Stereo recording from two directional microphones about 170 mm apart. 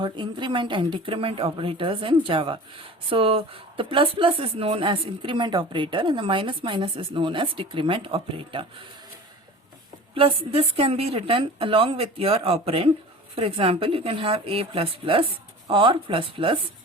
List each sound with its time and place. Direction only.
0.0 s speech: 30° right (ahead or behind)
10.2 s speech: 35° right (ahead or behind)